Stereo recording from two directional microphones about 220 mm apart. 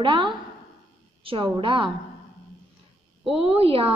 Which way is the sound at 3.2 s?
5° right (ahead or behind).